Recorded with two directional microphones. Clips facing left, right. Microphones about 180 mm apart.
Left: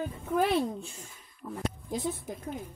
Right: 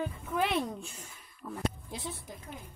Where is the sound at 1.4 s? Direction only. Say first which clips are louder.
Left 2 dB; 15° left (ahead or behind).